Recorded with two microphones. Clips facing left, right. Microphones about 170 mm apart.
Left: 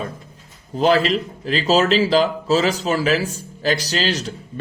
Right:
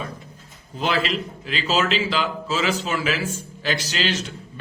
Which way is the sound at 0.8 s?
40° left (ahead or behind).